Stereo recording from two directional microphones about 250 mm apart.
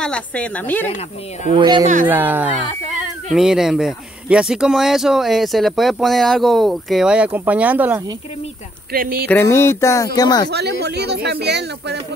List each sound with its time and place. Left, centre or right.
0.0 s speech: centre
1.5 s speech: centre
8.9 s speech: right
9.3 s speech: centre
10.5 s speech: right